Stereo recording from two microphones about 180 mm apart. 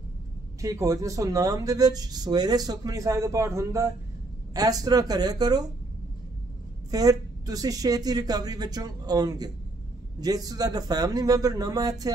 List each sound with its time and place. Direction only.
0.6 s speech: 20° right (ahead or behind)
6.9 s speech: 20° right (ahead or behind)